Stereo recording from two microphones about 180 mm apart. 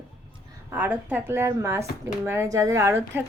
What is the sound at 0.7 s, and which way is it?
Speech, 10° right (ahead or behind).